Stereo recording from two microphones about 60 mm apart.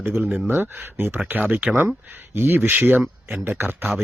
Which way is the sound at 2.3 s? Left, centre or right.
Right.